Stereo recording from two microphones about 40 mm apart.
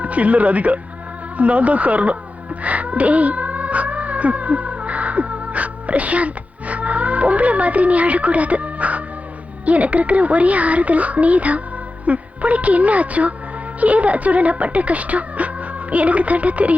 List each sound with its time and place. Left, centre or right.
0.0 s speech: right
2.6 s cat: right
9.6 s speech: right